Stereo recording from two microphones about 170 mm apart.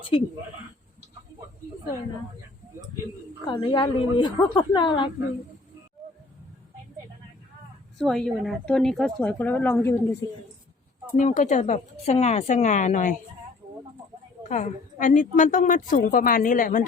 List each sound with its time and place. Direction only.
3.4 s a woman's voice: 30° left (ahead or behind)
7.9 s a woman's voice: centre (ahead or behind)
11.2 s a woman's voice: 45° left (ahead or behind)
14.4 s a woman's voice: 45° left (ahead or behind)